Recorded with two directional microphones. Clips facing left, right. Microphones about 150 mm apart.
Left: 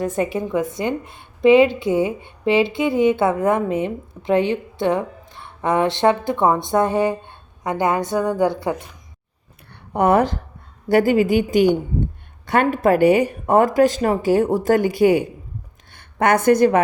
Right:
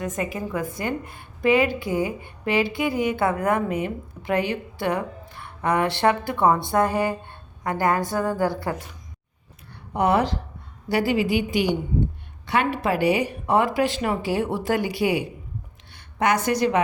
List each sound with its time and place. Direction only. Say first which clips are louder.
0.0 s speech: left 6 dB; 30° left (ahead or behind)
9.9 s a woman's voice: left 4 dB; 50° left (ahead or behind)